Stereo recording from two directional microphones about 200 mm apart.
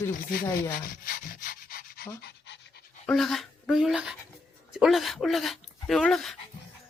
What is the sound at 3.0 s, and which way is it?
Speech, centre (ahead or behind).